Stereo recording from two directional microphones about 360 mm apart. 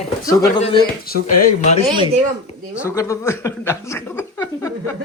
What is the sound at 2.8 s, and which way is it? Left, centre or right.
Speech, centre.